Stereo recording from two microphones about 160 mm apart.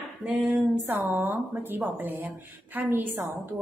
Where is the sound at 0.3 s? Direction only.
10° right (ahead or behind).